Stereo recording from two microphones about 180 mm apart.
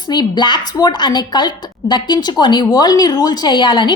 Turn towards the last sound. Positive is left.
turn(degrees=25)  # may be behind; listen again after turning